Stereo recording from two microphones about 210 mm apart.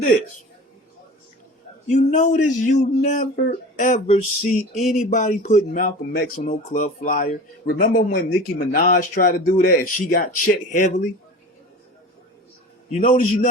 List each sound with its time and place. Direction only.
1.9 s speech: 35° left (ahead or behind)
12.9 s speech: 35° left (ahead or behind)